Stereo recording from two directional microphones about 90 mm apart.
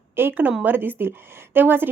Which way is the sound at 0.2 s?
20° right (ahead or behind).